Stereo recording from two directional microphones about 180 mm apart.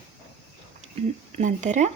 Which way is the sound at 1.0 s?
40° right (ahead or behind).